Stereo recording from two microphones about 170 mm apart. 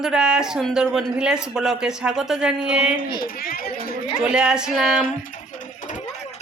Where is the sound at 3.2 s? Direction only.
55° left (ahead or behind).